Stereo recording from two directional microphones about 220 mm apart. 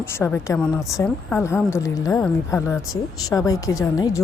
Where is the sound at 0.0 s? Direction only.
10° left (ahead or behind).